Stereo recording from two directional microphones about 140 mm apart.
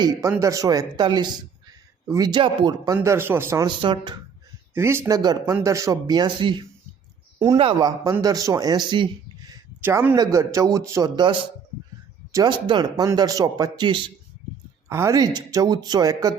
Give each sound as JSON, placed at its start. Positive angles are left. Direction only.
{"t": 0.0, "sound": "speech", "side_deg": -20}
{"t": 2.9, "sound": "speech", "side_deg": -20}
{"t": 3.7, "sound": "speech", "side_deg": -35}
{"t": 4.7, "sound": "speech", "side_deg": -15}
{"t": 7.8, "sound": "speech", "side_deg": -30}
{"t": 9.8, "sound": "speech", "side_deg": -15}
{"t": 12.3, "sound": "speech", "side_deg": -30}
{"t": 14.8, "sound": "speech", "side_deg": -20}